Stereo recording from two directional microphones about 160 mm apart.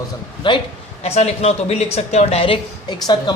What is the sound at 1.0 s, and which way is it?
Speech, 40° left (ahead or behind).